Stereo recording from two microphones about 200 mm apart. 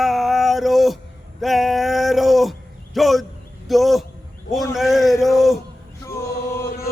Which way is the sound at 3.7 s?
Centre (ahead or behind).